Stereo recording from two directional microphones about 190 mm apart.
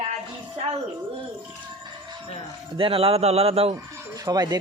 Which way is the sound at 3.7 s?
20° right (ahead or behind).